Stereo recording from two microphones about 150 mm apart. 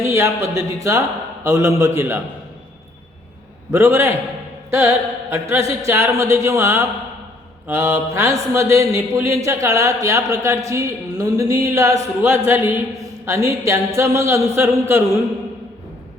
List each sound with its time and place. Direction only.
0.0 s mantra: 20° right (ahead or behind)
3.7 s mantra: 20° right (ahead or behind)
4.7 s a sound: 15° right (ahead or behind)
7.7 s mantra: 20° right (ahead or behind)